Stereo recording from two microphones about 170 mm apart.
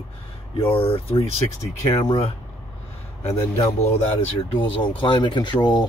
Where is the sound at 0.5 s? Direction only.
35° left (ahead or behind).